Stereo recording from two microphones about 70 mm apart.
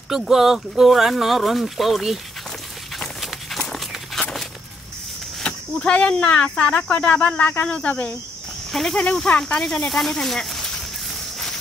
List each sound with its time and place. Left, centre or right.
0.1 s speech: centre
3.2 s walk: centre
5.4 s speech: centre
8.7 s speech: centre